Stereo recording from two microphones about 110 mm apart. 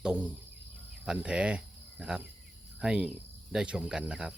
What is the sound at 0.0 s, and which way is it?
Speech, 10° right (ahead or behind).